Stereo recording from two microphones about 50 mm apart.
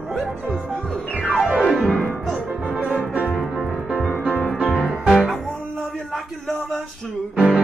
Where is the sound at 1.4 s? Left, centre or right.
Right.